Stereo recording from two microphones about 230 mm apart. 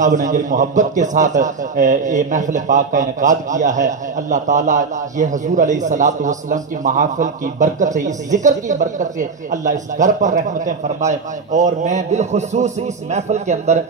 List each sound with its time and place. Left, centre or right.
0.0 s a man's voice: right